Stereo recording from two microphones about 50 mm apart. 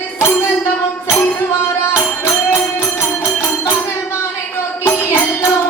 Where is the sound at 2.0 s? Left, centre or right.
Left.